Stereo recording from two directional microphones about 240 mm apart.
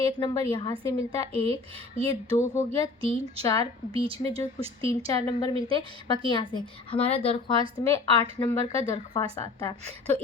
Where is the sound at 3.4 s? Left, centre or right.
Centre.